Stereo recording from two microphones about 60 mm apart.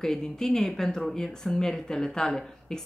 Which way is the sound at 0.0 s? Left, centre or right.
Centre.